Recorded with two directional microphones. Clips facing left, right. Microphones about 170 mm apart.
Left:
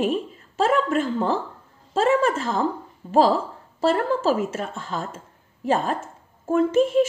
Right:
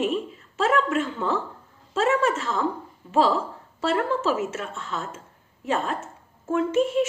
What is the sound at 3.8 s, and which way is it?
A woman's voice, 35° left (ahead or behind).